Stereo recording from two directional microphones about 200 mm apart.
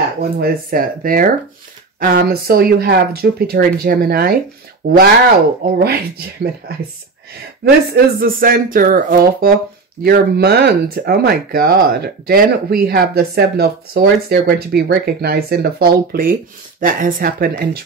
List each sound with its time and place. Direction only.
0.2 s speech: 50° right (ahead or behind)